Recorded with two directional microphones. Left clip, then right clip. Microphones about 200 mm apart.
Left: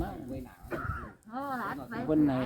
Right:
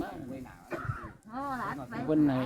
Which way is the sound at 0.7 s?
55° left (ahead or behind).